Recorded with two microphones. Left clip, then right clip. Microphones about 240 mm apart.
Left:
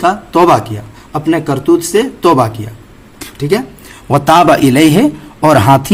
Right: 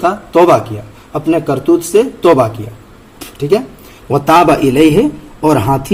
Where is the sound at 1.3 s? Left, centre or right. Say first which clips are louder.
Even; left.